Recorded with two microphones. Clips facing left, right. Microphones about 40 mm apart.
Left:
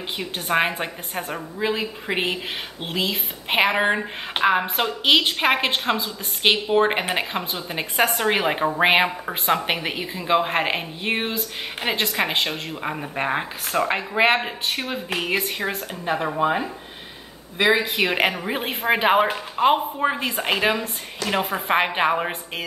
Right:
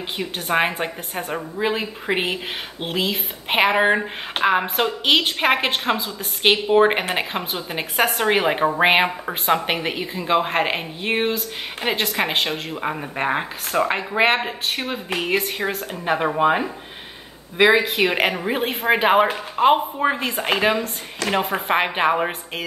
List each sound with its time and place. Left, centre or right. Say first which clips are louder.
0.2 s a woman's voice: right 1 dB; centre
16.1 s speech: right 3 dB; right
17.9 s a woman's voice: right 1 dB; centre